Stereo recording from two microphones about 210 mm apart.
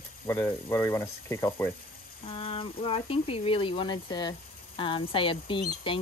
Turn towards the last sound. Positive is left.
turn(degrees=25)  # may be behind; listen again after turning